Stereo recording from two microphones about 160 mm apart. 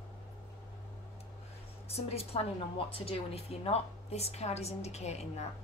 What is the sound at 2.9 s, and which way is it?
Speech, 35° left (ahead or behind).